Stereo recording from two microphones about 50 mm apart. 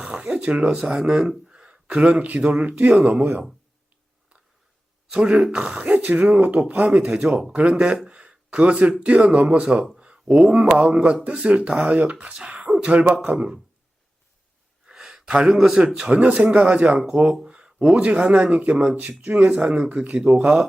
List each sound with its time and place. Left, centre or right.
0.0 s a sound: centre
0.9 s speech: centre
5.5 s speech: right
10.0 s a sound: right
10.8 s speech: centre
14.8 s gasp: centre
15.8 s speech: centre
17.4 s a sound: right
17.9 s speech: right